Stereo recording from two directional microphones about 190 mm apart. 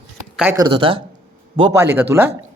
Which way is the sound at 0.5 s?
25° right (ahead or behind).